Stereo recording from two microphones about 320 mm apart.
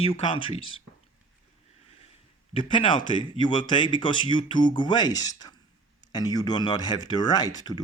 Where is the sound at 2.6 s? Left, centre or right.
Centre.